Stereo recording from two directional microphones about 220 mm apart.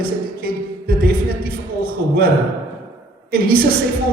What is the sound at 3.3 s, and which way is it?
Speech, 45° right (ahead or behind).